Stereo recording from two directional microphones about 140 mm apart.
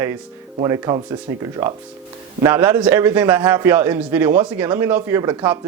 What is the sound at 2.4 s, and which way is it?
A man's voice, 20° right (ahead or behind).